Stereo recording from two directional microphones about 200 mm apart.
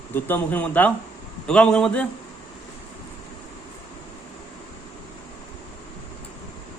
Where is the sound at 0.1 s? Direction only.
10° left (ahead or behind).